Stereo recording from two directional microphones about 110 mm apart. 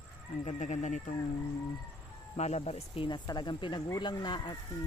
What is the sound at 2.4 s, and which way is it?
Speech, 85° left.